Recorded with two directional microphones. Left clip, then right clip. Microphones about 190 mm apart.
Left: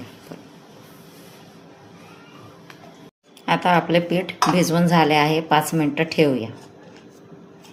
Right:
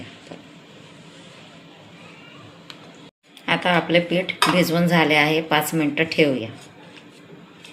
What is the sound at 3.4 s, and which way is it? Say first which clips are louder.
Speech: left 2 dB; 35° left (ahead or behind).